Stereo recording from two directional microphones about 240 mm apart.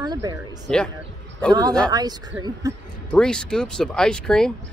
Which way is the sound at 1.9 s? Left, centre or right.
Centre.